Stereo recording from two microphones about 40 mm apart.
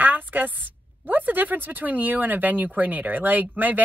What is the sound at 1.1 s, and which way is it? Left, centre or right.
Speech, right.